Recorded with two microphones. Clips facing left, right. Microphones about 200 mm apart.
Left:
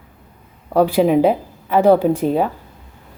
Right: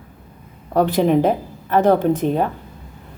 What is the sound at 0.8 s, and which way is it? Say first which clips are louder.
A woman's voice: left 2 dB; 10° left (ahead or behind).